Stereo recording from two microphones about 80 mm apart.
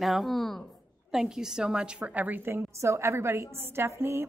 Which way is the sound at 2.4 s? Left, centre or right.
Right.